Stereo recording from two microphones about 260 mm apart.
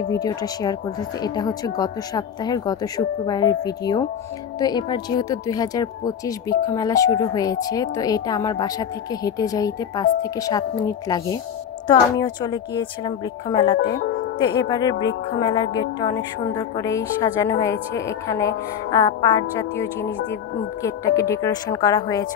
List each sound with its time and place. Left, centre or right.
0.1 s speech: centre
13.7 s speech: left
14.4 s speech: centre
20.8 s speech: centre